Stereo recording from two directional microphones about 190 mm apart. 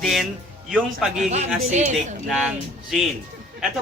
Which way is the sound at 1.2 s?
35° right (ahead or behind).